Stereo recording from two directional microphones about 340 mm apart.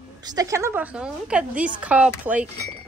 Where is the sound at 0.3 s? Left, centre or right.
Centre.